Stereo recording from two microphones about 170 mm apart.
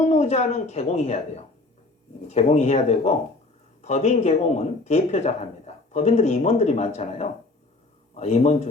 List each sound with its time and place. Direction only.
0.0 s speech: 40° left (ahead or behind)